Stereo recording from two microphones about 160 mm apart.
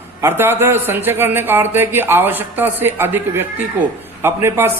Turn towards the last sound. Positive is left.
turn(degrees=-15)  # may be behind; listen again after turning